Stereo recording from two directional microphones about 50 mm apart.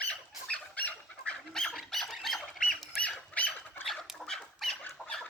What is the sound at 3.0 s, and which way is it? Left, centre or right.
Squawk, left.